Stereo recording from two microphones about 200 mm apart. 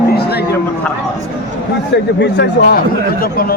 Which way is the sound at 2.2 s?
50° left (ahead or behind).